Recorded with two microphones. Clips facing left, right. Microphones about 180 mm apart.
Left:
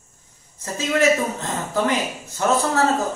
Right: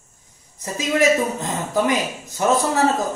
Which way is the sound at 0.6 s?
15° right (ahead or behind).